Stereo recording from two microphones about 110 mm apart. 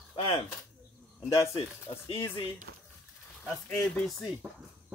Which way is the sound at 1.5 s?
60° left (ahead or behind).